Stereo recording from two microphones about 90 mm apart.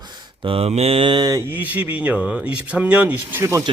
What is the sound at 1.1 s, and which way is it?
Speech, 50° right (ahead or behind).